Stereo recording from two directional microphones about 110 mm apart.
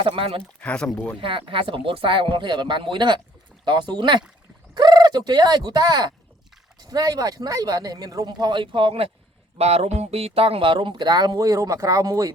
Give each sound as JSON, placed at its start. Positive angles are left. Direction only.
{"t": 0.2, "sound": "speech", "side_deg": -55}
{"t": 0.6, "sound": "speech", "side_deg": 10}
{"t": 1.2, "sound": "speech", "side_deg": -50}
{"t": 9.6, "sound": "speech", "side_deg": -70}